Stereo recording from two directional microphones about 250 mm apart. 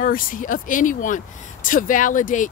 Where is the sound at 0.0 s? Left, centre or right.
Left.